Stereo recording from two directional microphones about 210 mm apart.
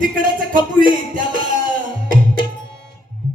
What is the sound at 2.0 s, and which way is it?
Tabla, 40° right (ahead or behind).